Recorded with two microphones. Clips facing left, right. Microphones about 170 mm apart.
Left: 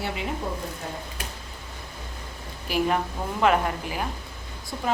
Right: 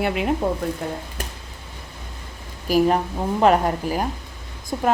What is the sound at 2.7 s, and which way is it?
Speech, 35° right (ahead or behind).